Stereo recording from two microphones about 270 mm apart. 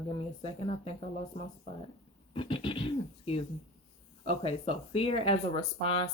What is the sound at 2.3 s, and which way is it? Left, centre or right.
Speech, centre.